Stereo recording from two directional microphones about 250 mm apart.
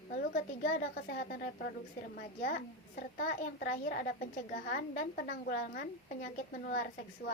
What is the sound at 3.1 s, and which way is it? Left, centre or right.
A woman's voice, left.